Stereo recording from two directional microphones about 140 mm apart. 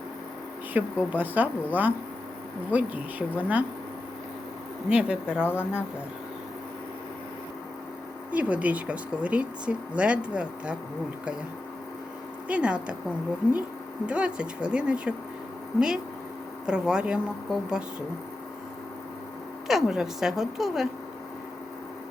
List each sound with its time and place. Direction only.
0.7 s speech: 10° right (ahead or behind)
4.9 s speech: 5° right (ahead or behind)
5.4 s speech: 15° left (ahead or behind)
8.3 s speech: 10° right (ahead or behind)
12.5 s speech: 10° right (ahead or behind)
14.1 s speech: 5° right (ahead or behind)
16.6 s speech: 5° right (ahead or behind)
19.6 s speech: 5° right (ahead or behind)